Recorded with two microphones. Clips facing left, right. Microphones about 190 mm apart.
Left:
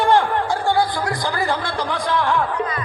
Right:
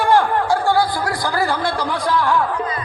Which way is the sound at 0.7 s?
20° left (ahead or behind).